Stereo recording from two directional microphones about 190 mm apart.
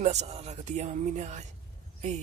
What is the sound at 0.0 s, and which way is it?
Speech, 35° right (ahead or behind).